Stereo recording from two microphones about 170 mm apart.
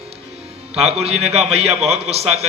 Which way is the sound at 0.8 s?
40° right (ahead or behind).